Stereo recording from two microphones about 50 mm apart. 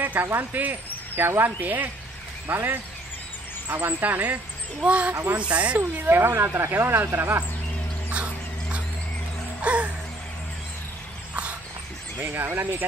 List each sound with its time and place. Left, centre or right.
0.0 s speech: right
1.2 s speech: right
1.6 s speech: right
4.8 s speech: right
5.8 s speech: right
6.4 s speech: right
9.6 s music: right
12.2 s speech: right